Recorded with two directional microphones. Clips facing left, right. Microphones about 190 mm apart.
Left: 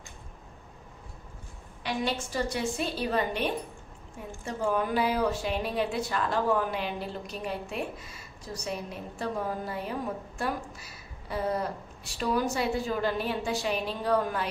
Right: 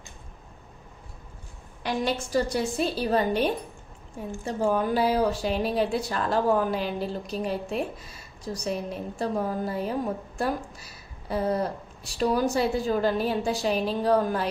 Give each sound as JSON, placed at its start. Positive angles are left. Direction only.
{"t": 2.3, "sound": "speech", "side_deg": -40}
{"t": 4.5, "sound": "speech", "side_deg": -35}